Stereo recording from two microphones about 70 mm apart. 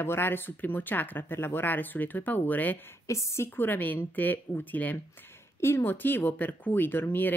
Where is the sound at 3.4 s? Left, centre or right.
Left.